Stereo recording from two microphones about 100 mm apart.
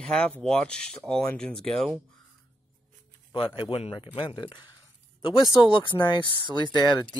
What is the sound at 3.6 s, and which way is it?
Speech, 60° left (ahead or behind).